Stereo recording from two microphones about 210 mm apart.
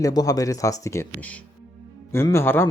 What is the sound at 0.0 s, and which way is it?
Speech, 15° left (ahead or behind).